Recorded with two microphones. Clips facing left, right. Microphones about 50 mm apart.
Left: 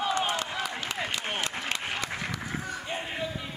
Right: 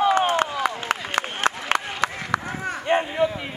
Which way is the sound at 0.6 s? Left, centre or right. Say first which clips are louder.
Right 7 dB; right.